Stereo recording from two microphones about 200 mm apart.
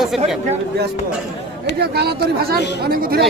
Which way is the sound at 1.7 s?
55° right (ahead or behind).